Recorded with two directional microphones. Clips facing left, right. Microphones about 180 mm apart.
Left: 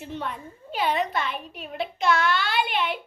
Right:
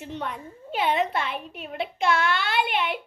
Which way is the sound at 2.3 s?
60° right (ahead or behind).